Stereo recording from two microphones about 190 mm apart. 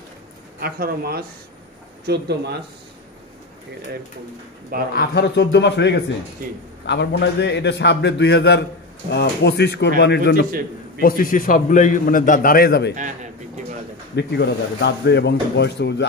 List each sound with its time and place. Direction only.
0.6 s speech: 50° right (ahead or behind)
4.9 s speech: 65° left (ahead or behind)
11.0 s a man's voice: 50° left (ahead or behind)
12.9 s a man's voice: 40° right (ahead or behind)
14.1 s speech: 60° left (ahead or behind)